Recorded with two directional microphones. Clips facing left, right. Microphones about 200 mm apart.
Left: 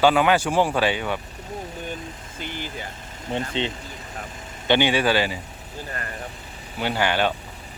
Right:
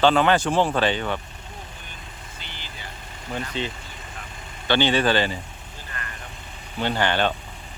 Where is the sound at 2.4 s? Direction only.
50° left (ahead or behind).